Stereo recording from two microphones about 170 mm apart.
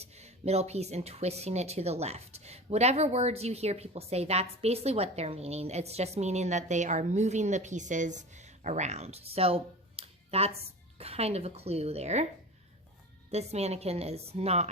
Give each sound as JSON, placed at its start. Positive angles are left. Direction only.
{"t": 0.0, "sound": "speech", "side_deg": -40}
{"t": 13.3, "sound": "speech", "side_deg": -40}